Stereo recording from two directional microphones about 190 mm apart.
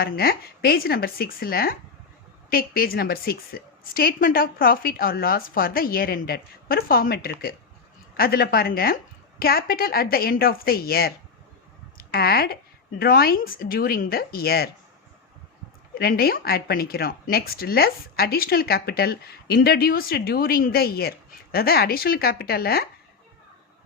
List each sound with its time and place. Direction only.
0.0 s speech: 50° left (ahead or behind)
12.1 s speech: 55° left (ahead or behind)
16.0 s speech: 55° left (ahead or behind)